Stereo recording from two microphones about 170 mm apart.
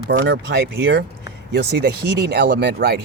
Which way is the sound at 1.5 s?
80° right.